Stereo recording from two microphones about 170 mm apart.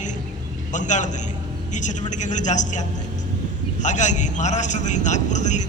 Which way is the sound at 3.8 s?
45° left (ahead or behind).